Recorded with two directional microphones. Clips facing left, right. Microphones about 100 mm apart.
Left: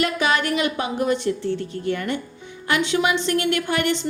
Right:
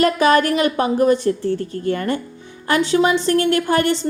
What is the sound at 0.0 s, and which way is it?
A woman's voice, 40° right (ahead or behind).